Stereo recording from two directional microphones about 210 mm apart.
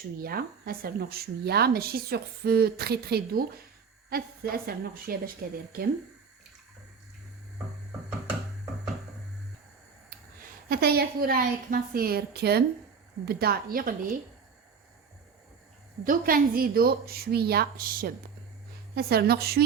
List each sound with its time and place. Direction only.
0.2 s a woman's voice: 45° right (ahead or behind)
10.7 s a woman's voice: 50° right (ahead or behind)
16.0 s a woman's voice: 45° right (ahead or behind)